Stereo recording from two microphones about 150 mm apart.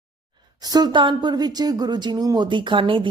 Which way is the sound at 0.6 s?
25° right (ahead or behind).